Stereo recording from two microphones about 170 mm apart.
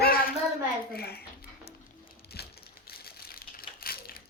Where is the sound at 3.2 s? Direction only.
60° left (ahead or behind).